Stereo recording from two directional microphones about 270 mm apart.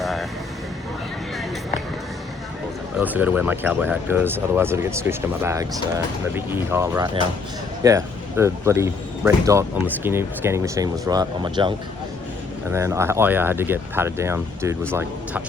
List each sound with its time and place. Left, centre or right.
0.0 s vehicle: centre
3.0 s speech: centre
12.7 s speech: centre